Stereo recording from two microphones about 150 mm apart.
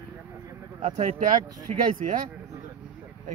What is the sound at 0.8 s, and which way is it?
Speech, 45° right (ahead or behind).